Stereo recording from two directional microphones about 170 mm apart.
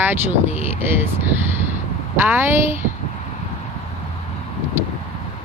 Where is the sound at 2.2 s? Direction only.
10° right (ahead or behind).